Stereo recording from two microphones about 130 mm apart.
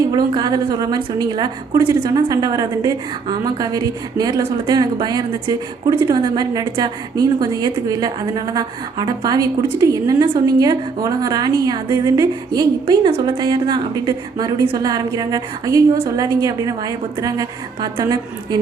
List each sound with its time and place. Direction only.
0.0 s a woman's voice: 30° right (ahead or behind)
13.1 s a woman's voice: 45° right (ahead or behind)
13.3 s a woman's voice: 30° right (ahead or behind)